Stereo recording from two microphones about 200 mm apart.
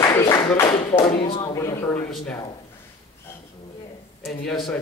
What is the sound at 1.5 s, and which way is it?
Speech, 15° left (ahead or behind).